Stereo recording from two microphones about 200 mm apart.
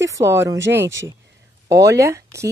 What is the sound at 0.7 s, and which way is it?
Speech, 60° right (ahead or behind).